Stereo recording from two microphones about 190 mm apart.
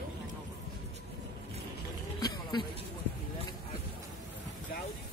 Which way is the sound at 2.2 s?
20° left (ahead or behind).